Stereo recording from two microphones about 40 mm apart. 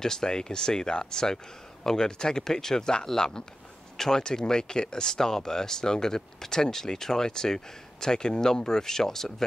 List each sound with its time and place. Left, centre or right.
0.0 s speech: centre